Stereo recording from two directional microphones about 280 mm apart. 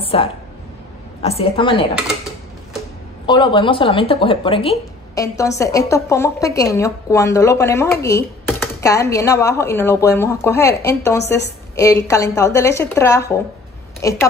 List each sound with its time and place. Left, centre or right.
0.0 s a sound: centre
1.2 s a woman's voice: left
3.3 s speech: centre